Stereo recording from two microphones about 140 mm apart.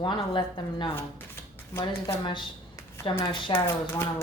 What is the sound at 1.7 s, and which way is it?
Speech, 20° left (ahead or behind).